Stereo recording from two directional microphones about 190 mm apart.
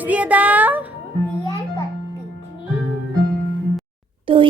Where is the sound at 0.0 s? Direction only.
10° right (ahead or behind).